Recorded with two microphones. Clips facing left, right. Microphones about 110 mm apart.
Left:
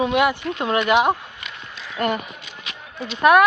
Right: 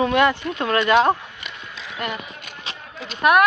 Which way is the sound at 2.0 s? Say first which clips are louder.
Left 6 dB; 45° left (ahead or behind).